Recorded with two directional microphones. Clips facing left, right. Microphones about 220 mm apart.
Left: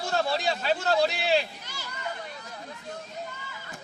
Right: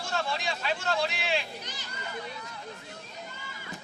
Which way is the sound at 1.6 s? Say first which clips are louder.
Even; 20° right (ahead or behind).